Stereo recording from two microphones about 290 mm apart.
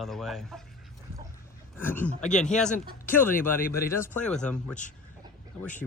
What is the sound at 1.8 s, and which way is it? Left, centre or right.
Speech, centre.